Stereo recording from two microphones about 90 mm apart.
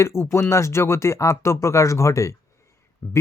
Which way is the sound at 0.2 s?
30° left (ahead or behind).